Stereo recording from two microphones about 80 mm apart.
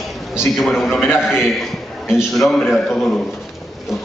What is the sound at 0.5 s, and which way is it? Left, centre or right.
Speech, centre.